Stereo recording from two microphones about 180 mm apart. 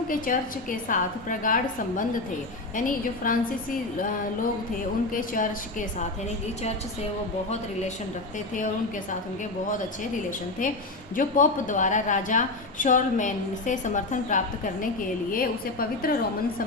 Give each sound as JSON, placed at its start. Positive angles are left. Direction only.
{"t": 0.1, "sound": "a woman's voice", "side_deg": 50}
{"t": 2.7, "sound": "a woman's voice", "side_deg": 50}
{"t": 5.1, "sound": "a woman's voice", "side_deg": 50}
{"t": 11.2, "sound": "a woman's voice", "side_deg": 45}